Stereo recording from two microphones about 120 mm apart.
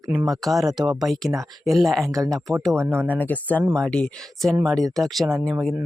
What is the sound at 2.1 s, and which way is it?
Speech, 30° right (ahead or behind).